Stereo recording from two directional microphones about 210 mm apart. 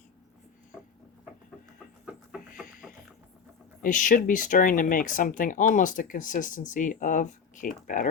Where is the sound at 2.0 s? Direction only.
Centre (ahead or behind).